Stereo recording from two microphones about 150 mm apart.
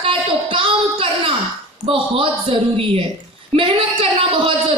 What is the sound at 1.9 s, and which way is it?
A woman's voice, 35° right (ahead or behind).